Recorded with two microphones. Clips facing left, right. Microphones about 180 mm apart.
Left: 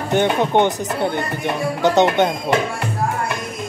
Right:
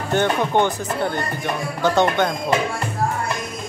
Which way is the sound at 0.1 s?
20° left (ahead or behind).